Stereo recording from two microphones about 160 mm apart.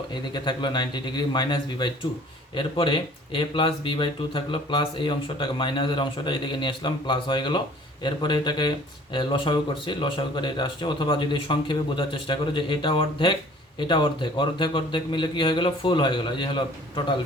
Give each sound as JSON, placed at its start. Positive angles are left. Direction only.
{"t": 0.1, "sound": "speech", "side_deg": 30}